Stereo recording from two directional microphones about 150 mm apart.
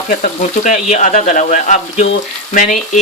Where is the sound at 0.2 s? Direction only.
60° left (ahead or behind).